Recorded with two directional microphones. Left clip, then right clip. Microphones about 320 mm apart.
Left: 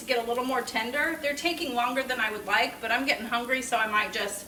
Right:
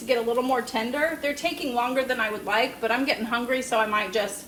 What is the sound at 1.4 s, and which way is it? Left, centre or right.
A woman's voice, centre.